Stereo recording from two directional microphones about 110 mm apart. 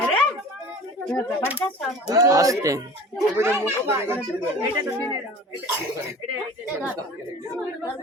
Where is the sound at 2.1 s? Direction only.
30° right (ahead or behind).